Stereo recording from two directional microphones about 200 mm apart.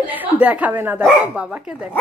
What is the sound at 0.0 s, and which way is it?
A woman's voice, 10° right (ahead or behind).